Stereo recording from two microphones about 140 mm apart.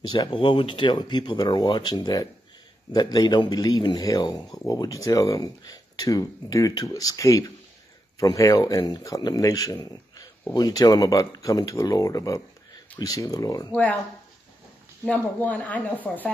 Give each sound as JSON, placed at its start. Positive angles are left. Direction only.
{"t": 0.1, "sound": "a man's voice", "side_deg": 35}
{"t": 15.0, "sound": "speech", "side_deg": 10}